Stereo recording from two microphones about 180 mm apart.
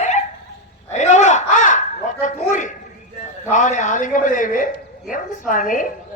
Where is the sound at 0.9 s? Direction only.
40° left (ahead or behind).